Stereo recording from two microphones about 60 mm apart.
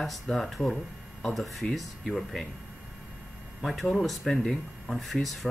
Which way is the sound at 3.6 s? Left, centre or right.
Centre.